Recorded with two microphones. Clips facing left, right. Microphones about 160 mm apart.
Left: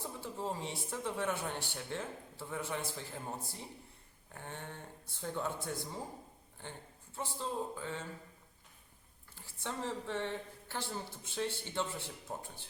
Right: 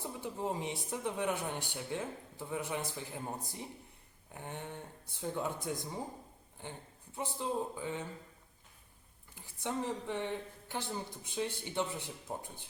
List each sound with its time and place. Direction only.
0.0 s speech: 15° right (ahead or behind)
7.2 s speech: 15° right (ahead or behind)
9.3 s speech: 15° right (ahead or behind)